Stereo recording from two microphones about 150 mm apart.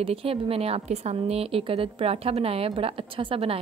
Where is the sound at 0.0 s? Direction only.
40° right (ahead or behind).